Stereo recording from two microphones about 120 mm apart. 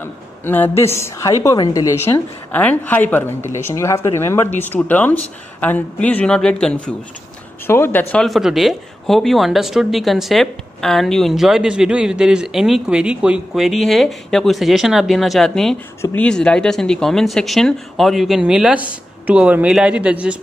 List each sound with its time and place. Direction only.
0.5 s a woman's voice: 20° left (ahead or behind)
2.5 s speech: 15° left (ahead or behind)
7.6 s a woman's voice: 20° left (ahead or behind)
8.2 s speech: centre (ahead or behind)